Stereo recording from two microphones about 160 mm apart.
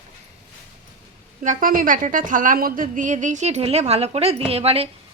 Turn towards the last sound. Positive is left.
turn(degrees=-40)  # may be behind; listen again after turning